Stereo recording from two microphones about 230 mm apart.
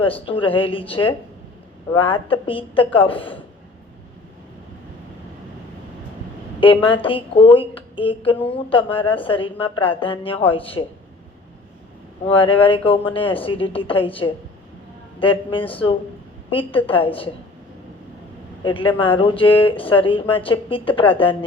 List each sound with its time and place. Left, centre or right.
0.0 s speech: left
6.8 s speech: left
12.3 s speech: left
18.6 s speech: left